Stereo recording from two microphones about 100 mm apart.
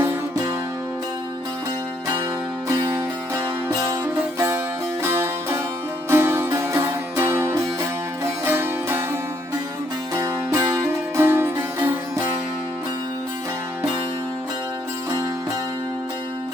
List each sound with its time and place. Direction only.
2.6 s music: 30° right (ahead or behind)
10.2 s music: 30° right (ahead or behind)